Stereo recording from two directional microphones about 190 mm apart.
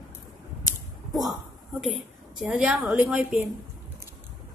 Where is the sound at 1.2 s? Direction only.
Centre (ahead or behind).